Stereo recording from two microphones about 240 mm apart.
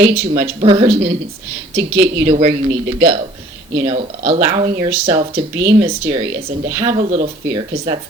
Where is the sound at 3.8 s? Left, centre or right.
Right.